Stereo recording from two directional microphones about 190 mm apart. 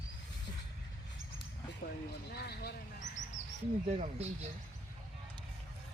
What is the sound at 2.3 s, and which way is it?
Vehicle, 55° left (ahead or behind).